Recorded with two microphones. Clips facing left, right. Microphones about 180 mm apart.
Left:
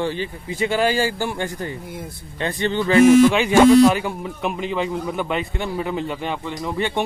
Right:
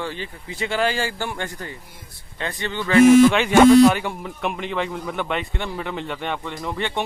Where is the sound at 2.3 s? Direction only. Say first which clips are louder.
Left 6 dB; 25° left (ahead or behind).